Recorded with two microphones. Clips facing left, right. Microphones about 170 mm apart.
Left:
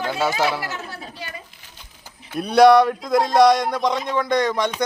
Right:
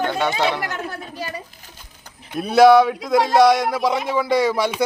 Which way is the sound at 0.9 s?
40° right (ahead or behind).